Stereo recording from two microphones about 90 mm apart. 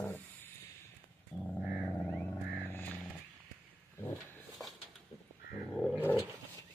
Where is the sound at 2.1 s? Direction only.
25° left (ahead or behind).